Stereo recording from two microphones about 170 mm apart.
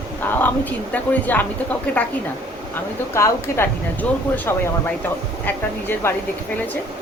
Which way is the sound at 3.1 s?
15° left (ahead or behind).